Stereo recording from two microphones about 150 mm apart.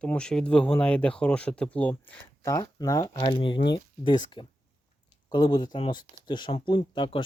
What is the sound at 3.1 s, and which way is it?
Speech, 35° left (ahead or behind).